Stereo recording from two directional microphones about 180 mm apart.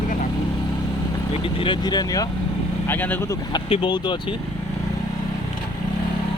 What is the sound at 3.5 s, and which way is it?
Speech, 25° left (ahead or behind).